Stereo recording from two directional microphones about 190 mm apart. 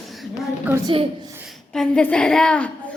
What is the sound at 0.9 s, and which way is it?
Speech, 25° right (ahead or behind).